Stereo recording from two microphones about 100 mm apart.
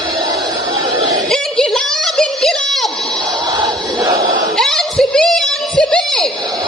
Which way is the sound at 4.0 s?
35° right (ahead or behind).